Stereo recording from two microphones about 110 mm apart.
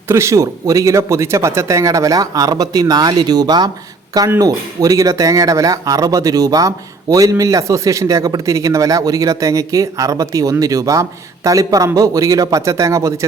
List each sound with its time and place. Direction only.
0.1 s speech: 25° right (ahead or behind)